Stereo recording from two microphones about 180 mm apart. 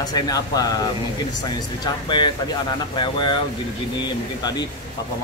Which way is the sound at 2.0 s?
25° left (ahead or behind).